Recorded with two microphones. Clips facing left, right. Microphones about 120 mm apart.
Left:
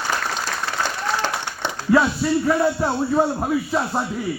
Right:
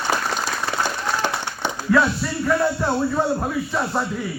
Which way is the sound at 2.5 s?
10° left (ahead or behind).